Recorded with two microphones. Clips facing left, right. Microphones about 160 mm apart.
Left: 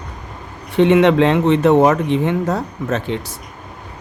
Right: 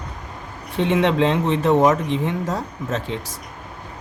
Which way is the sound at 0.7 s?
65° left (ahead or behind).